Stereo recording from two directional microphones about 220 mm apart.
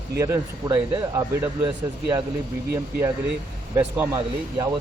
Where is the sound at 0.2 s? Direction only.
10° right (ahead or behind).